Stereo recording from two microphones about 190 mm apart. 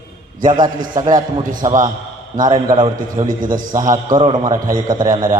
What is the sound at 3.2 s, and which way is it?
Speech, 45° right (ahead or behind).